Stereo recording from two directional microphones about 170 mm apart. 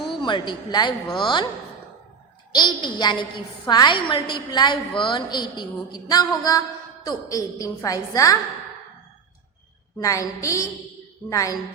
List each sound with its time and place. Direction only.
0.1 s a woman's voice: 30° left (ahead or behind)
2.5 s a woman's voice: 25° left (ahead or behind)
10.0 s a woman's voice: 20° left (ahead or behind)